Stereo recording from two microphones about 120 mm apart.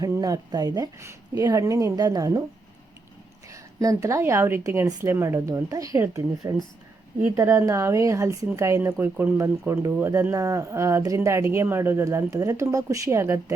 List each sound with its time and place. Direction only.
0.0 s speech: 30° right (ahead or behind)
0.9 s speech: 25° right (ahead or behind)
3.5 s a woman's voice: 30° right (ahead or behind)